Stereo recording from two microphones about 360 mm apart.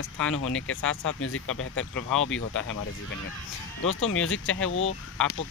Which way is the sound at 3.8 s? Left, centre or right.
Left.